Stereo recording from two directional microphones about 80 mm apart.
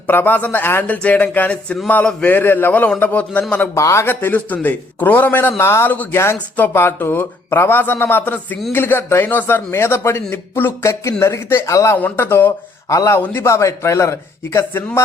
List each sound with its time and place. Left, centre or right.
0.1 s speech: left
3.8 s a man's voice: left
4.0 s speech: left
5.9 s speech: left
6.1 s a man's voice: left
11.7 s speech: left
11.9 s speech: left
12.9 s a man's voice: left
13.1 s a man's voice: left